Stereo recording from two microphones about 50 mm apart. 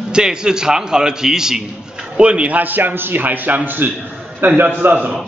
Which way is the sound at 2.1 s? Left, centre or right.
Right.